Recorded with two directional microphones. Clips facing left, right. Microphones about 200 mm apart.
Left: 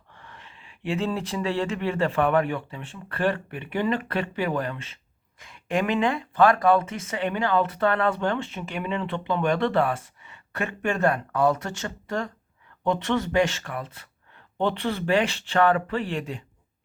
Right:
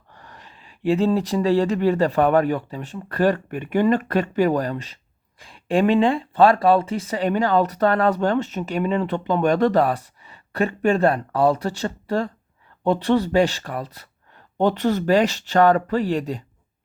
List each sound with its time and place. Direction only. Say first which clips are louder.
0.1 s speech: right 2 dB; 40° right (ahead or behind)